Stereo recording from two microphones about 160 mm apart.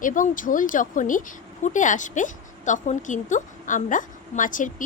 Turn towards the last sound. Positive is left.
turn(degrees=55)  # may be behind; listen again after turning